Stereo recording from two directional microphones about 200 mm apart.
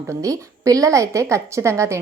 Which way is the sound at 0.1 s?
15° right (ahead or behind).